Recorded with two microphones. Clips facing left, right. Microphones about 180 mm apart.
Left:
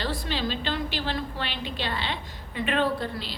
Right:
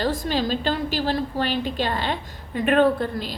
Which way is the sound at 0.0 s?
45° right (ahead or behind).